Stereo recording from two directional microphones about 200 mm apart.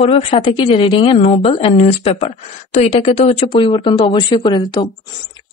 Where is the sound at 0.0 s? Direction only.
25° left (ahead or behind).